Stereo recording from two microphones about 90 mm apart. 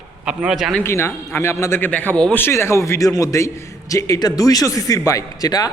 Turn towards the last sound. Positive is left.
turn(degrees=45)  # may be behind; listen again after turning